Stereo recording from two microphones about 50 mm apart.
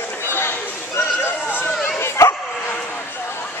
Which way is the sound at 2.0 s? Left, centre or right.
Left.